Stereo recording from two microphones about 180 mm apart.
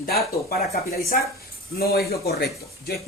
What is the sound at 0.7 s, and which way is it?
Speech, 55° left (ahead or behind).